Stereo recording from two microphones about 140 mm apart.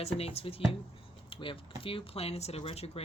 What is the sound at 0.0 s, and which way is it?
Speech, 45° left (ahead or behind).